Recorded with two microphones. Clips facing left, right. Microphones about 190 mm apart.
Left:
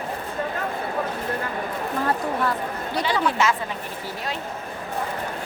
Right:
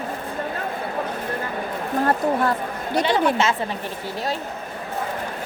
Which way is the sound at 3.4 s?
25° right (ahead or behind).